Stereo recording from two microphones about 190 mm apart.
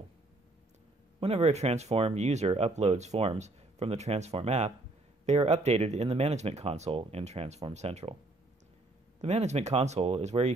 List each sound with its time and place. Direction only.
1.2 s speech: 35° right (ahead or behind)
9.2 s speech: 35° right (ahead or behind)